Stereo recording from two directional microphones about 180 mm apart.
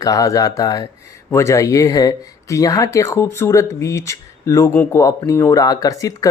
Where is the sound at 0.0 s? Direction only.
20° left (ahead or behind).